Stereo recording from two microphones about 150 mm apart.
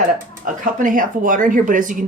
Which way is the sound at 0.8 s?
65° right (ahead or behind).